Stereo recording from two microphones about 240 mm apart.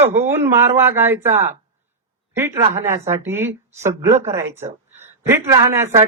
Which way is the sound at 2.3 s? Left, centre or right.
Centre.